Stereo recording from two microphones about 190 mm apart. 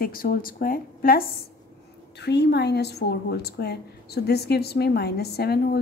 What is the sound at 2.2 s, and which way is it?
Speech, 60° left (ahead or behind).